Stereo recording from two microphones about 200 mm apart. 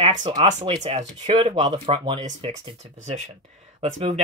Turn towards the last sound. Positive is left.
turn(degrees=-30)  # may be behind; listen again after turning